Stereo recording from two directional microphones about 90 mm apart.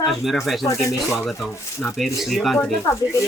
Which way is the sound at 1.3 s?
Centre (ahead or behind).